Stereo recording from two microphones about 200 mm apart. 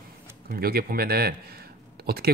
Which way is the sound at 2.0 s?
50° right (ahead or behind).